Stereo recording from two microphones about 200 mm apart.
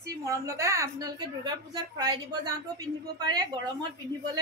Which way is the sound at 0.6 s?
15° right (ahead or behind).